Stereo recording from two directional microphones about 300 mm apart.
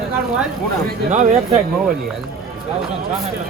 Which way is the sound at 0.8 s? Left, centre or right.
Right.